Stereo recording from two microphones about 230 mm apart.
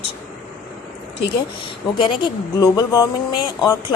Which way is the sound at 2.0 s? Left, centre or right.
Centre.